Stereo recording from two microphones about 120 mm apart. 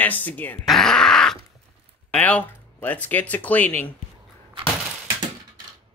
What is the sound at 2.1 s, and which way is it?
Speech, 10° left (ahead or behind).